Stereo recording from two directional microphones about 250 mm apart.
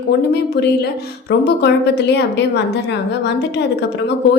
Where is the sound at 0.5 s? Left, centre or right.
Left.